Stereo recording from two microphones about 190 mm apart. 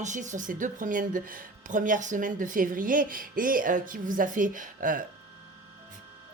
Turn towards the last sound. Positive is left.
turn(degrees=-45)  # may be behind; listen again after turning